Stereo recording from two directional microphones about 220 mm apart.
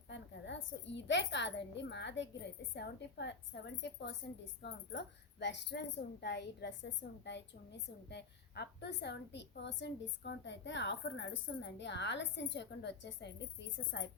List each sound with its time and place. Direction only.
0.1 s a woman's voice: 55° left (ahead or behind)